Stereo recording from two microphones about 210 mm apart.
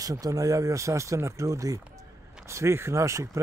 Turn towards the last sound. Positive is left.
turn(degrees=-15)  # may be behind; listen again after turning